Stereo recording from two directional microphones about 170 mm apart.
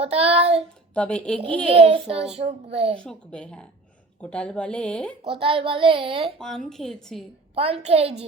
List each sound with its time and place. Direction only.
0.0 s a child's voice: 35° right (ahead or behind)
0.9 s speech: 5° left (ahead or behind)
1.7 s a child's voice: 35° right (ahead or behind)
3.0 s speech: 5° left (ahead or behind)
5.2 s a child's voice: 30° right (ahead or behind)
6.7 s speech: 5° left (ahead or behind)
7.5 s a child's voice: 35° right (ahead or behind)